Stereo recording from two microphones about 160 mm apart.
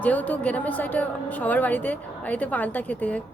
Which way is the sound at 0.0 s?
10° left (ahead or behind).